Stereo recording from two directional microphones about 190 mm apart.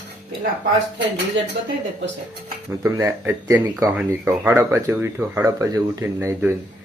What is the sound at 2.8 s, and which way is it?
Speech, 15° right (ahead or behind).